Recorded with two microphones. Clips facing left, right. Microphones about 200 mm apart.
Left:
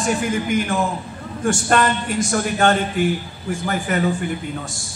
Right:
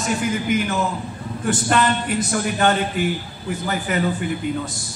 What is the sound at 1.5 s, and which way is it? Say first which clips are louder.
A man's voice: left 1 dB; 45° left (ahead or behind).